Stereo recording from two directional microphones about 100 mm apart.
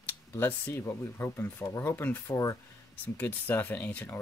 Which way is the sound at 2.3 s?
35° left (ahead or behind).